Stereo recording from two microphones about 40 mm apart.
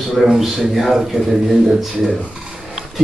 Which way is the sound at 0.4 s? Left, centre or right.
Centre.